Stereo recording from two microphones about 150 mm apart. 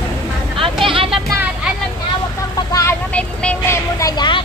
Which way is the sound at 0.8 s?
35° right (ahead or behind).